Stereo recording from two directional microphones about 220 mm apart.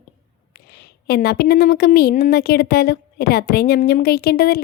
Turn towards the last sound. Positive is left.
turn(degrees=45)  # may be behind; listen again after turning